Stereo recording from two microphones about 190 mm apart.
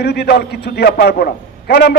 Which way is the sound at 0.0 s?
60° left (ahead or behind).